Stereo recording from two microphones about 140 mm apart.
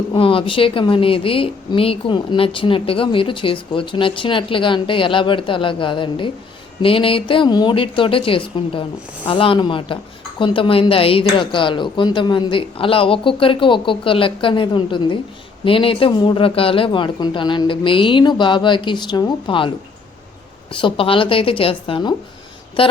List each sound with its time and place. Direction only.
0.1 s speech: 40° left (ahead or behind)
20.7 s speech: 40° left (ahead or behind)